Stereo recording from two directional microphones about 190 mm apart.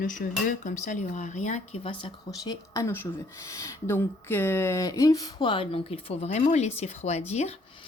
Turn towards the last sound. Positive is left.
turn(degrees=35)  # may be behind; listen again after turning